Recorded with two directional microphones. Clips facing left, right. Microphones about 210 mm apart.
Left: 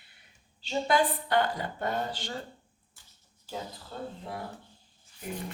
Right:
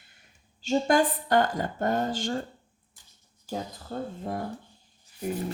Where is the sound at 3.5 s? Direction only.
45° right (ahead or behind).